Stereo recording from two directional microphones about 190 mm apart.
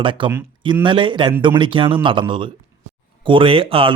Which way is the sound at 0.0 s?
25° right (ahead or behind).